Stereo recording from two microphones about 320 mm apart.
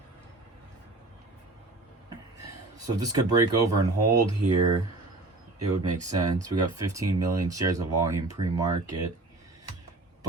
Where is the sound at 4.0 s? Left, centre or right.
Right.